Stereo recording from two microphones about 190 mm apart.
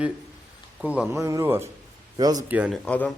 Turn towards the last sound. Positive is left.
turn(degrees=5)  # may be behind; listen again after turning